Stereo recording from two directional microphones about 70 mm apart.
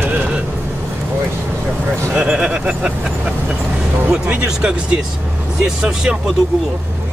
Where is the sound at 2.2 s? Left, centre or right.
Centre.